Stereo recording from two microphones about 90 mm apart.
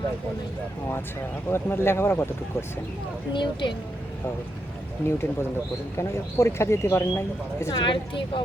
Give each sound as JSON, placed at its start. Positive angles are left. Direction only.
{"t": 1.5, "sound": "speech", "side_deg": 25}
{"t": 3.3, "sound": "speech", "side_deg": 60}
{"t": 5.0, "sound": "speech", "side_deg": 25}
{"t": 7.8, "sound": "speech", "side_deg": 65}